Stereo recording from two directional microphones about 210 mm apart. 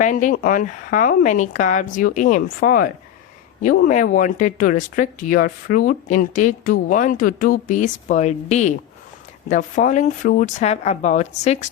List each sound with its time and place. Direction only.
0.0 s speech: 35° left (ahead or behind)